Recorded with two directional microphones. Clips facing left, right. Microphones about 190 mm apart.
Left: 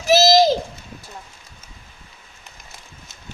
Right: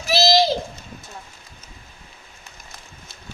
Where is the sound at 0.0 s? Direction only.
45° left (ahead or behind).